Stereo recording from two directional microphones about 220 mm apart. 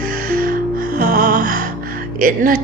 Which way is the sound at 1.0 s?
40° right (ahead or behind).